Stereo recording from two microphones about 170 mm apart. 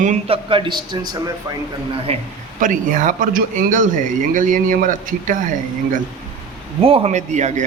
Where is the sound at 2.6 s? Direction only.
50° right (ahead or behind).